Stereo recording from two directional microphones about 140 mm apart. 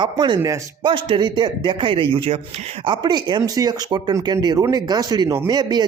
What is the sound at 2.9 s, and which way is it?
A man's voice, 30° right (ahead or behind).